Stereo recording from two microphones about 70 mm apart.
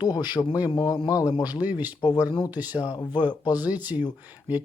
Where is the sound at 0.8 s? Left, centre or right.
Left.